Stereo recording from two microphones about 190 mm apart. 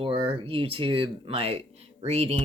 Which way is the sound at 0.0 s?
30° right (ahead or behind).